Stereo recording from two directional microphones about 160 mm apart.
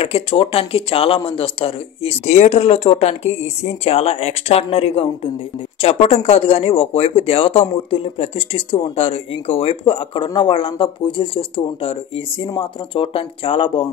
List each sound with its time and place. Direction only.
0.0 s speech: 35° left (ahead or behind)